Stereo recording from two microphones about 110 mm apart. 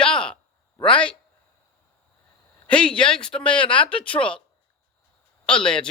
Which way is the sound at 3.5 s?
50° left (ahead or behind).